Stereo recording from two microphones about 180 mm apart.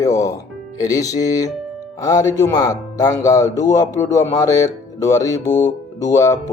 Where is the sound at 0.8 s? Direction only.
20° left (ahead or behind).